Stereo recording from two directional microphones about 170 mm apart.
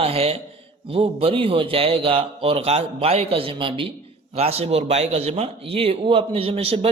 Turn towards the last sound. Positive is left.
turn(degrees=-35)  # may be behind; listen again after turning